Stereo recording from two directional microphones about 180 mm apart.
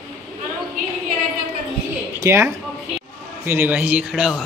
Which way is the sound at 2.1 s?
15° right (ahead or behind).